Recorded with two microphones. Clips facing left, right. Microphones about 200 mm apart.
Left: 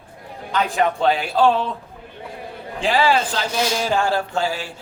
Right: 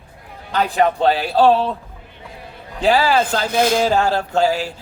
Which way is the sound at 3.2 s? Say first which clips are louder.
Right 5 dB; 55° right (ahead or behind).